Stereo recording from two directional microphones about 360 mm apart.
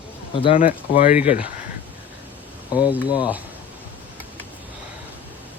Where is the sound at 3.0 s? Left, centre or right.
Centre.